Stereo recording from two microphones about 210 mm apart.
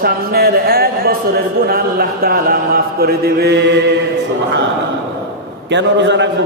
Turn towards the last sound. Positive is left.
turn(degrees=-55)  # may be behind; listen again after turning